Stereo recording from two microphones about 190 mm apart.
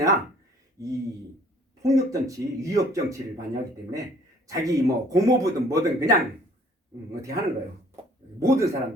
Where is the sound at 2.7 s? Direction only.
15° right (ahead or behind).